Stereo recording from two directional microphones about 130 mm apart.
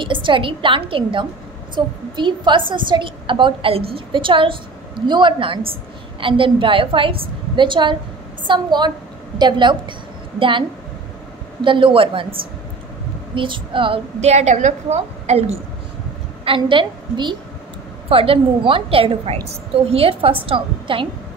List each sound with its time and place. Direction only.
0.0 s a woman's voice: 40° right (ahead or behind)
11.6 s a woman's voice: 40° right (ahead or behind)
13.3 s a woman's voice: 40° right (ahead or behind)
14.2 s a woman's voice: 60° right (ahead or behind)
16.4 s a woman's voice: 40° right (ahead or behind)